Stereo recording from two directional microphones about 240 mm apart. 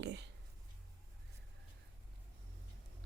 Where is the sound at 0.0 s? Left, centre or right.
Right.